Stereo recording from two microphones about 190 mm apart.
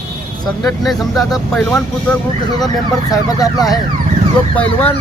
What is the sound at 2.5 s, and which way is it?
Speech, 20° left (ahead or behind).